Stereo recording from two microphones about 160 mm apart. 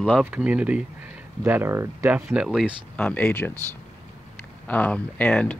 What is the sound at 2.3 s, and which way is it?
Speech, 5° right (ahead or behind).